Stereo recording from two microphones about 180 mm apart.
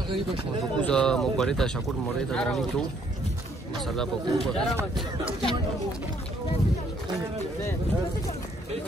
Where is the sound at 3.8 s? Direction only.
Centre (ahead or behind).